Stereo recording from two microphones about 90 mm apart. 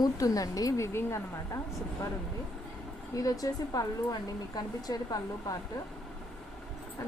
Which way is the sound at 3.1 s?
40° left (ahead or behind).